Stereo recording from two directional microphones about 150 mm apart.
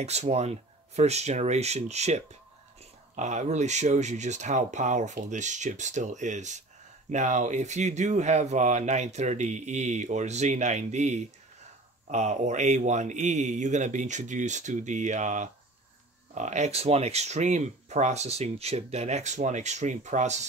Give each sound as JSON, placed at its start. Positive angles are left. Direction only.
{"t": 0.0, "sound": "speech", "side_deg": -45}